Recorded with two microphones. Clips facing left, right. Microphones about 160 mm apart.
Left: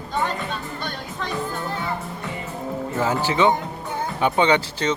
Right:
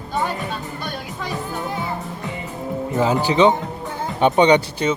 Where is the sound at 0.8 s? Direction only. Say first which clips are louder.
Right 1 dB; 10° right (ahead or behind).